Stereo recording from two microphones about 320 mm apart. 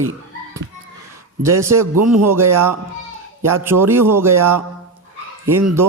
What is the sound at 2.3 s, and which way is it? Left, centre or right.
A man's voice, centre.